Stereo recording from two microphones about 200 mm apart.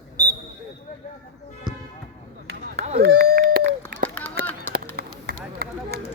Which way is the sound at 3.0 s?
50° right (ahead or behind).